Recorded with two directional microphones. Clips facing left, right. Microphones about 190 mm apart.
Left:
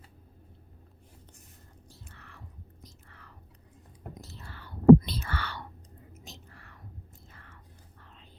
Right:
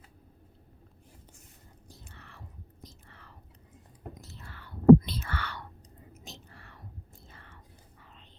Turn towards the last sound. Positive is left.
turn(degrees=-25)  # may be behind; listen again after turning